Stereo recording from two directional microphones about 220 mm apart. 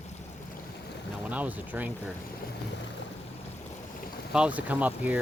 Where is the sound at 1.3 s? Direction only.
5° right (ahead or behind).